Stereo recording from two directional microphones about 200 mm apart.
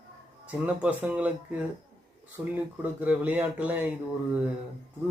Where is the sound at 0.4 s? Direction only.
5° right (ahead or behind).